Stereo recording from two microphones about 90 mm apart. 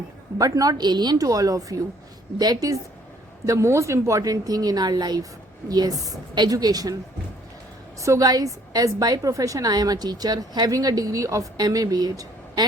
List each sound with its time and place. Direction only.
0.3 s a woman's voice: 40° right (ahead or behind)
3.4 s a woman's voice: 35° right (ahead or behind)
8.0 s a woman's voice: 40° right (ahead or behind)